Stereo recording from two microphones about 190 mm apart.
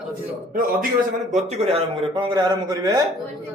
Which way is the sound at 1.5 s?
30° right (ahead or behind).